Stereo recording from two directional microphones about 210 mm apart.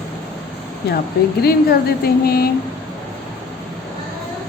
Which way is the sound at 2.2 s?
45° left (ahead or behind).